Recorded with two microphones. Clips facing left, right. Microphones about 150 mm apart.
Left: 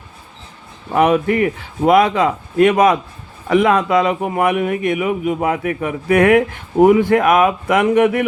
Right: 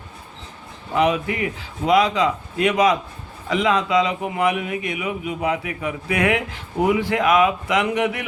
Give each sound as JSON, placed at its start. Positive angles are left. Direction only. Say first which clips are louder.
{"t": 0.9, "sound": "speech", "louder": "left 6 dB", "side_deg": 50}